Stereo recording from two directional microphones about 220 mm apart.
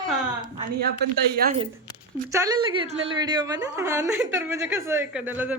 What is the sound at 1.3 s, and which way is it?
Speech, 45° right (ahead or behind).